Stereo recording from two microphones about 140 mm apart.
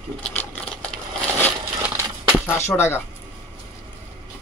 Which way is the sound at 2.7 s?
15° left (ahead or behind).